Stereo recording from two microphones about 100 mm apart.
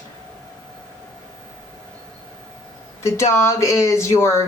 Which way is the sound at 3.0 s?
30° left (ahead or behind).